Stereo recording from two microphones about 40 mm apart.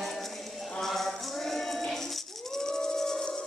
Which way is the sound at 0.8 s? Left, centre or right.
Centre.